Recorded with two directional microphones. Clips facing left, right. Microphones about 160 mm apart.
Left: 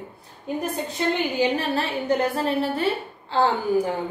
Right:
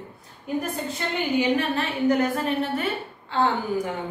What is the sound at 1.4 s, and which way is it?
A woman's voice, 35° left (ahead or behind).